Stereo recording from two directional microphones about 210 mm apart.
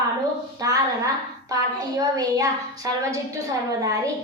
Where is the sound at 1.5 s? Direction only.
15° right (ahead or behind).